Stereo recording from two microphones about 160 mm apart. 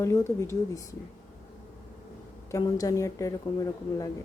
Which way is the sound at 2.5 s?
20° left (ahead or behind).